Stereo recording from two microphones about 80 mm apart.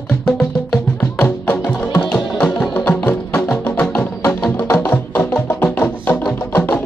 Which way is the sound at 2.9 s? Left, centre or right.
Left.